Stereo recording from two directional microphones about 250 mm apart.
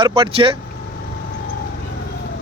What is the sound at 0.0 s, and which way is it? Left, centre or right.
Speech, right.